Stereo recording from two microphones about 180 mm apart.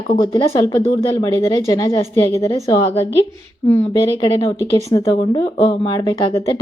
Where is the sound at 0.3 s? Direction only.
20° left (ahead or behind).